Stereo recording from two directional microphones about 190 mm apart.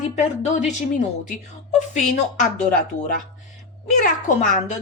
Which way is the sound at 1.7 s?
40° left (ahead or behind).